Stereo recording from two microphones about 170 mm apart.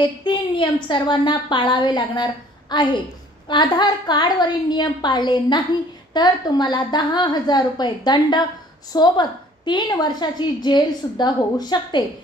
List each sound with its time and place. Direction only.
0.2 s a woman's voice: 25° left (ahead or behind)